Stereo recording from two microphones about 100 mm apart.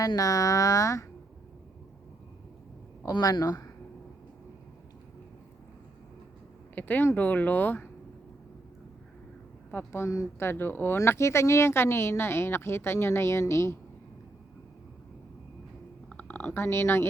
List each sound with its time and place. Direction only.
0.0 s speech: 35° left (ahead or behind)
3.1 s speech: 40° left (ahead or behind)
6.7 s speech: 15° left (ahead or behind)
9.7 s speech: 25° left (ahead or behind)
16.0 s speech: 15° left (ahead or behind)